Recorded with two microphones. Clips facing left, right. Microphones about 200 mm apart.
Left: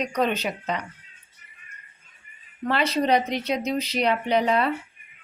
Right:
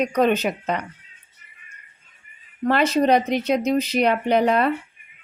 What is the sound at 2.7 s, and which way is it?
Speech, 45° right (ahead or behind).